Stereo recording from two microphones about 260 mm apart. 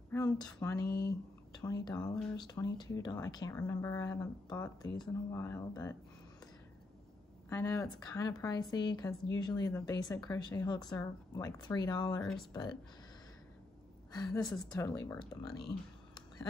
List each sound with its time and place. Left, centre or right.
0.1 s speech: centre
0.8 s speech: left
1.6 s speech: centre
7.4 s speech: centre
12.2 s speech: centre
14.1 s speech: centre
14.4 s speech: centre
14.7 s speech: centre